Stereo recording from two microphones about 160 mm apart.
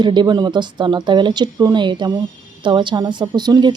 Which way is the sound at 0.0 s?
30° right (ahead or behind).